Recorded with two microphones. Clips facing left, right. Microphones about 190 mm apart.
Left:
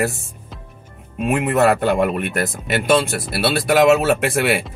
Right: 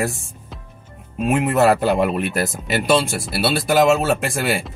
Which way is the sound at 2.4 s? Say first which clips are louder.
Even; centre (ahead or behind).